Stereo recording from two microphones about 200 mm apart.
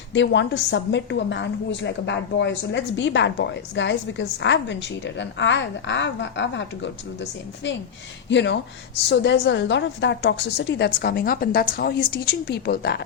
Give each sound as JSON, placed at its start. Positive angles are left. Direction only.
{"t": 0.1, "sound": "a woman's voice", "side_deg": 65}